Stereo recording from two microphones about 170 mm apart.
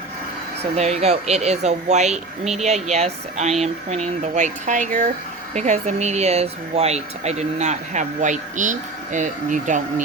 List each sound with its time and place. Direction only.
0.8 s speech: 40° right (ahead or behind)